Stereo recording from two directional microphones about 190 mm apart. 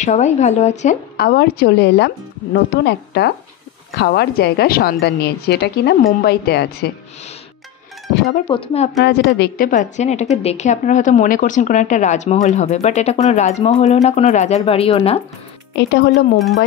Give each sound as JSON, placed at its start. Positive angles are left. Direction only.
{"t": 0.0, "sound": "speech", "side_deg": 40}
{"t": 1.1, "sound": "a woman's voice", "side_deg": 55}
{"t": 8.5, "sound": "speech", "side_deg": 30}
{"t": 9.0, "sound": "a woman's voice", "side_deg": 60}
{"t": 15.7, "sound": "a woman's voice", "side_deg": 65}